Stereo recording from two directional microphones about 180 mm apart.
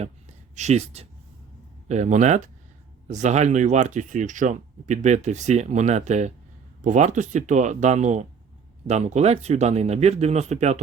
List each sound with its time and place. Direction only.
0.5 s speech: 40° right (ahead or behind)